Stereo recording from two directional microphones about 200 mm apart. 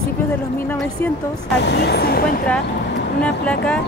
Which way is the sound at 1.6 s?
55° left (ahead or behind).